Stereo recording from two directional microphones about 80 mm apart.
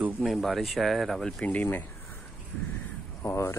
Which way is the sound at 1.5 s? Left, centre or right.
Left.